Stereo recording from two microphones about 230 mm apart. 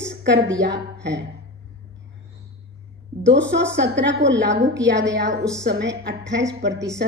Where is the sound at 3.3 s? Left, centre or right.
Right.